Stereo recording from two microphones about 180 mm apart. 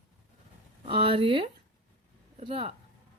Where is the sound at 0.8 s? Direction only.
30° right (ahead or behind).